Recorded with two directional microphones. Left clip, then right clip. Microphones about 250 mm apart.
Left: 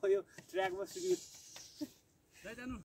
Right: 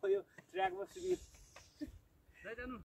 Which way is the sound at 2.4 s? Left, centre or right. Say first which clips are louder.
Right 1 dB; left.